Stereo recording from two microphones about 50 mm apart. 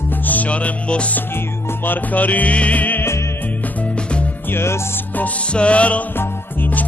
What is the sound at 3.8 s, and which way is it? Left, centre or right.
Music, left.